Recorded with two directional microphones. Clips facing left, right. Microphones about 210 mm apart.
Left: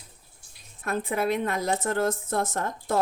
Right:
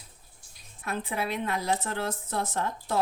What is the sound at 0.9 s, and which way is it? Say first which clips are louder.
A woman's voice: left 5 dB; 45° left (ahead or behind).